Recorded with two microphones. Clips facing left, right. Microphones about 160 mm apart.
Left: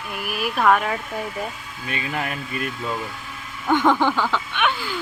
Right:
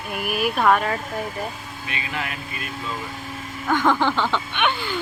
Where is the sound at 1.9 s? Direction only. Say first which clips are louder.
Left 3 dB; 45° left (ahead or behind).